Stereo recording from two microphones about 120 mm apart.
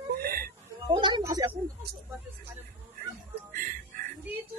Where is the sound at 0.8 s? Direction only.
40° right (ahead or behind).